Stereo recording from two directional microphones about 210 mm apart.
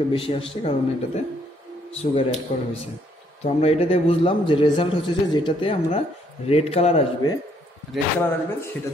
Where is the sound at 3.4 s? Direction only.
30° left (ahead or behind).